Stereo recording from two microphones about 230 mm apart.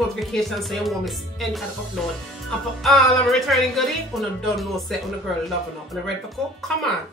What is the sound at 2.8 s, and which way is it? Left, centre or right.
Speech, centre.